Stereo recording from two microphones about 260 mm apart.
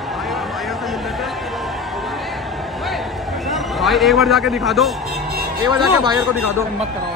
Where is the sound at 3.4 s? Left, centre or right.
Centre.